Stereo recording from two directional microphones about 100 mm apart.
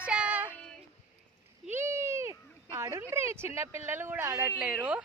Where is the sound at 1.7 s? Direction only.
25° right (ahead or behind).